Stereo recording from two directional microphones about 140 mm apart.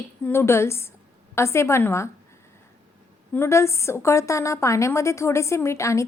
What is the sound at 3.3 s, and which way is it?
A woman's voice, 20° left (ahead or behind).